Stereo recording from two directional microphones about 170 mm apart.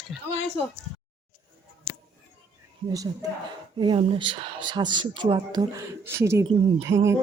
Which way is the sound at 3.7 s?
30° right (ahead or behind).